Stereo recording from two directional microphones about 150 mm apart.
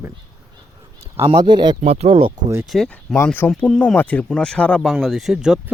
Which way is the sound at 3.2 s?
15° left (ahead or behind).